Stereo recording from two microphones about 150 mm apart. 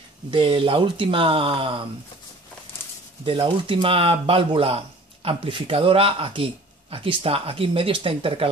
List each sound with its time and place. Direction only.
0.3 s speech: 35° right (ahead or behind)
3.3 s speech: 35° right (ahead or behind)